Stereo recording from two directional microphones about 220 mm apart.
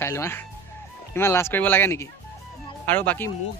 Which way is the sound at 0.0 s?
10° left (ahead or behind).